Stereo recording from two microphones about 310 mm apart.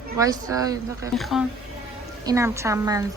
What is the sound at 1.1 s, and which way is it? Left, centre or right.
A woman's voice, centre.